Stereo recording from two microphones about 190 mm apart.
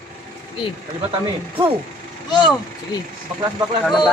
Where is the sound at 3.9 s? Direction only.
Centre (ahead or behind).